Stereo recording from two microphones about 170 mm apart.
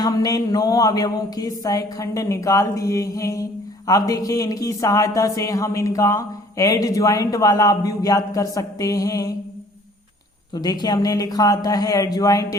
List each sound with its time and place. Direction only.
0.0 s speech: 20° left (ahead or behind)
10.5 s speech: 25° left (ahead or behind)